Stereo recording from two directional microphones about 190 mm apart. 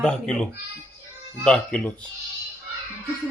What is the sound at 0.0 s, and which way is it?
Speech, 5° left (ahead or behind).